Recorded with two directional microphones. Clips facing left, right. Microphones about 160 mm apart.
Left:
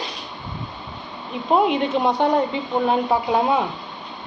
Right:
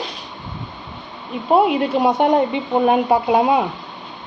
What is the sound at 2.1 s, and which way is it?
Speech, 20° right (ahead or behind).